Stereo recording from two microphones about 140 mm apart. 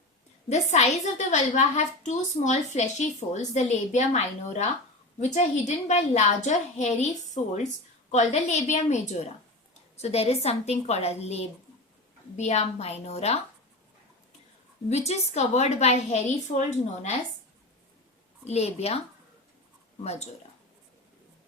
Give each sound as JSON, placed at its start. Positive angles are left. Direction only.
{"t": 0.4, "sound": "a woman's voice", "side_deg": 55}
{"t": 14.8, "sound": "a woman's voice", "side_deg": 50}
{"t": 18.4, "sound": "a woman's voice", "side_deg": 50}
{"t": 20.1, "sound": "a woman's voice", "side_deg": 50}